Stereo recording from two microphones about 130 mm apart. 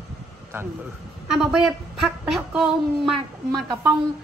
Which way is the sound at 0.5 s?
20° right (ahead or behind).